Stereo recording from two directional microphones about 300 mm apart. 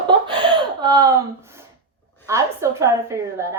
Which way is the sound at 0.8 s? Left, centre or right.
Centre.